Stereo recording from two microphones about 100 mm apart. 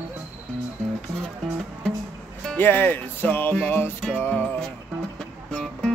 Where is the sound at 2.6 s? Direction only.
20° left (ahead or behind).